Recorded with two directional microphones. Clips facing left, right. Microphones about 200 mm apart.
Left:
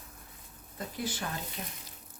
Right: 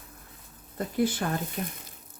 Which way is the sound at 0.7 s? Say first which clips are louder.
Right 10 dB; 55° right (ahead or behind).